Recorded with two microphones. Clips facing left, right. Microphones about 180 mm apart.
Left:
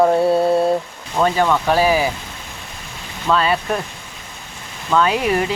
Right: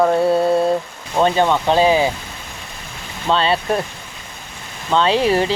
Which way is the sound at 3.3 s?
30° right (ahead or behind).